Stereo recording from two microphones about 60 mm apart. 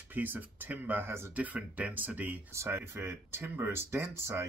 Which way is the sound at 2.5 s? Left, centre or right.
Right.